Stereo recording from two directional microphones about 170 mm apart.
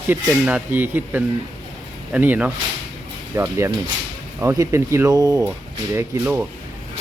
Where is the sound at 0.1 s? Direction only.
10° right (ahead or behind).